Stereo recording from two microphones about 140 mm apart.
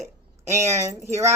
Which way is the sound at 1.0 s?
20° right (ahead or behind).